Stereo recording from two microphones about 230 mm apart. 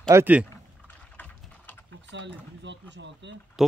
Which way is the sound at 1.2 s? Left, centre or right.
Centre.